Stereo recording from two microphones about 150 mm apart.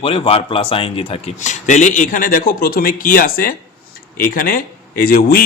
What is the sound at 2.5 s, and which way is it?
Speech, 75° left (ahead or behind).